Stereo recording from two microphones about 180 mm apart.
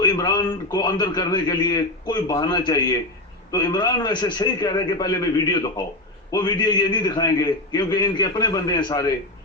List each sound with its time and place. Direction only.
0.0 s a man's voice: 20° left (ahead or behind)